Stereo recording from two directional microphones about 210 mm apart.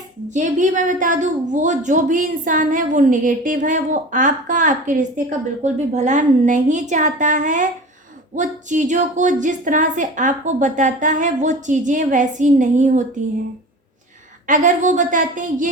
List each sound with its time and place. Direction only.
0.3 s a woman's voice: 35° right (ahead or behind)
14.4 s a woman's voice: 40° right (ahead or behind)